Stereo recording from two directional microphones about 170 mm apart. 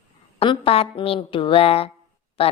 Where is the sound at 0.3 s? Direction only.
35° left (ahead or behind).